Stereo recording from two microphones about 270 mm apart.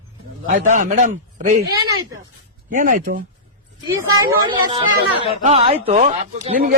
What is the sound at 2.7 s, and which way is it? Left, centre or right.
Speech, right.